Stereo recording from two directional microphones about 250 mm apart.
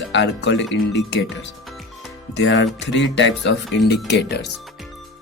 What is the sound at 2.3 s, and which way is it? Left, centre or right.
Speech, left.